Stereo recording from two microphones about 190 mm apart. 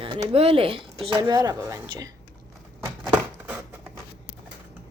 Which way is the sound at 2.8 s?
10° right (ahead or behind).